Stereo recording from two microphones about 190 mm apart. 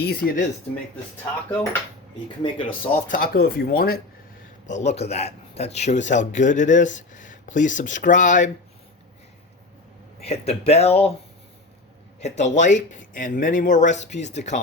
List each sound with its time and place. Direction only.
0.0 s speech: 55° left (ahead or behind)
2.4 s speech: 25° left (ahead or behind)
2.9 s speech: 50° left (ahead or behind)
4.6 s speech: 40° left (ahead or behind)
10.2 s speech: 35° left (ahead or behind)
12.4 s speech: 40° left (ahead or behind)